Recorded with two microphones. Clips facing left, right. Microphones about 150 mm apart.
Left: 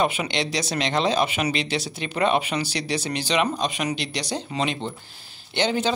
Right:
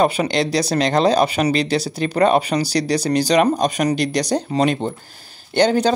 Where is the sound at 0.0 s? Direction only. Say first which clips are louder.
Right 6 dB; 40° right (ahead or behind).